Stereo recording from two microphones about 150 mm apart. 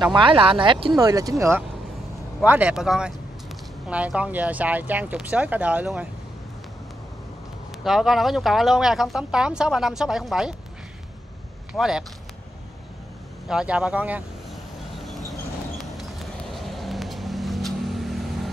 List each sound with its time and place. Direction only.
0.0 s speech: 35° right (ahead or behind)
0.9 s speech: 25° right (ahead or behind)
2.4 s speech: 10° right (ahead or behind)
7.8 s speech: centre (ahead or behind)
11.7 s speech: 5° right (ahead or behind)
13.5 s vehicle: 5° right (ahead or behind)